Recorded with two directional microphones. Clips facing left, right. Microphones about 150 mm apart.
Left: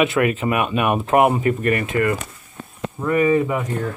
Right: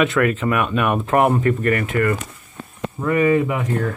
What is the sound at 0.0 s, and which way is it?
Speech, 10° left (ahead or behind).